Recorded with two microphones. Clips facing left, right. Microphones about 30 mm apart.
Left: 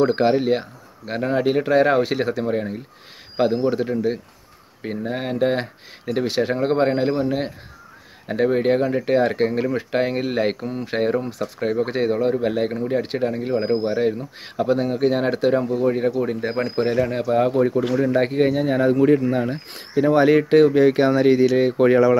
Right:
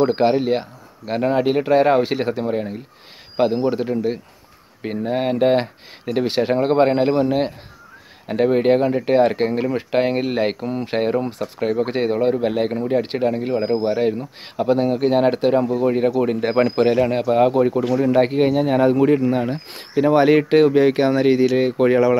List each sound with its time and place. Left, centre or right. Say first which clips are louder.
0.0 s speech: right 1 dB; centre; by 6.2 s right
6.4 s speech: right 4 dB; centre
8.3 s speech: right 3 dB; centre
11.2 s speech: right 1 dB; right
11.6 s speech: right 1 dB; centre
16.2 s speech: right 4 dB; right
16.5 s speech: right 8 dB; right
16.9 s speech: right 3 dB; right